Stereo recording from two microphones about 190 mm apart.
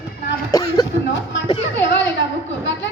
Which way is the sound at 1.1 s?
70° left (ahead or behind).